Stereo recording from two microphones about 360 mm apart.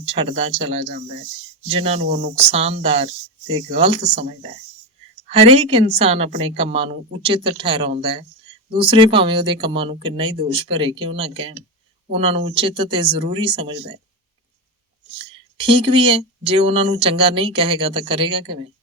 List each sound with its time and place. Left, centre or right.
0.0 s speech: centre
15.2 s speech: centre